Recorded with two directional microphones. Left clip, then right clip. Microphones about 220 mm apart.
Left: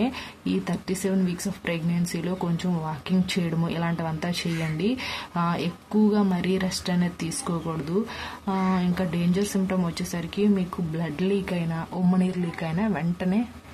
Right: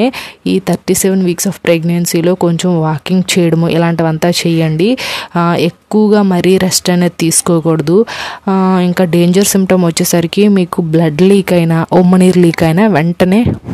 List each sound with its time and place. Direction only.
0.0 s speech: 50° right (ahead or behind)